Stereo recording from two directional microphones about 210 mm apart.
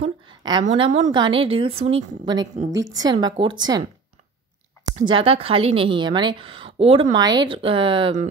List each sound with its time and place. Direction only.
0.0 s a sound: 20° right (ahead or behind)
0.7 s a woman's voice: 30° right (ahead or behind)
2.7 s a woman's voice: 60° right (ahead or behind)
3.0 s a woman's voice: 20° right (ahead or behind)
5.0 s a woman's voice: 25° right (ahead or behind)